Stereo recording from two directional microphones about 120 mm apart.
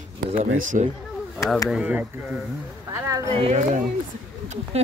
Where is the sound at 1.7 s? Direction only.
10° right (ahead or behind).